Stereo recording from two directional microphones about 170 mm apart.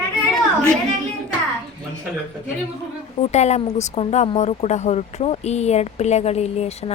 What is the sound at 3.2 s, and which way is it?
Speech, 40° left (ahead or behind).